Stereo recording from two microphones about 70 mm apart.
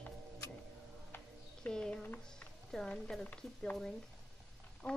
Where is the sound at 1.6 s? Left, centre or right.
Centre.